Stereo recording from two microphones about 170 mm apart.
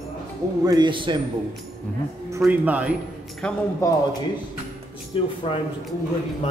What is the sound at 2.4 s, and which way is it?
Speech, 10° right (ahead or behind).